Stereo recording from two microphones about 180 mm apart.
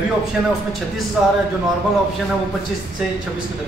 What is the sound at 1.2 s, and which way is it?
Speech, 5° right (ahead or behind).